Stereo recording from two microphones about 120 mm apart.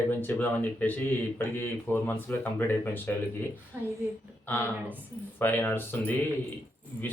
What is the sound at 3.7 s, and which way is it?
Speech, 20° right (ahead or behind).